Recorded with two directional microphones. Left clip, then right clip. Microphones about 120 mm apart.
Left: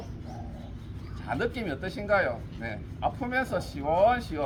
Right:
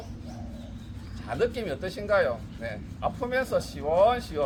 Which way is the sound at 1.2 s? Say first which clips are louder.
Right 3 dB; 25° right (ahead or behind).